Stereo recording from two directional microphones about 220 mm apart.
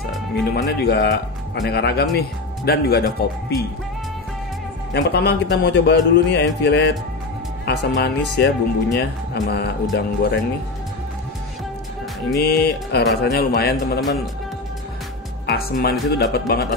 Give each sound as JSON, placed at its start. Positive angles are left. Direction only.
{"t": 0.5, "sound": "speech", "side_deg": 45}
{"t": 4.9, "sound": "speech", "side_deg": 50}
{"t": 12.4, "sound": "speech", "side_deg": 50}
{"t": 15.4, "sound": "speech", "side_deg": 45}